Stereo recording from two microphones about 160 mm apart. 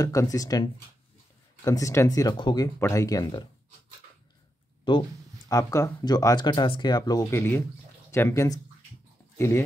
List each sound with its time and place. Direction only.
0.0 s speech: 20° left (ahead or behind)
5.5 s speech: 20° left (ahead or behind)